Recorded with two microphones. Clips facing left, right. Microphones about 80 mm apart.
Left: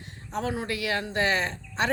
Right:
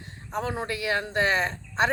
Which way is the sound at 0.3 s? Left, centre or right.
Right.